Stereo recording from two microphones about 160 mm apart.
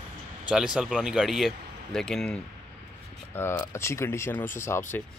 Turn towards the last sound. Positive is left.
turn(degrees=15)  # may be behind; listen again after turning